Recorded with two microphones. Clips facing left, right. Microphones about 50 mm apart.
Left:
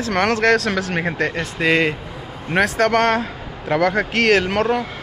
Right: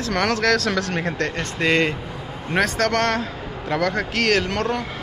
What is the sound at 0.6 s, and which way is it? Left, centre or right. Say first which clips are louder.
A man's voice: left 2 dB; centre.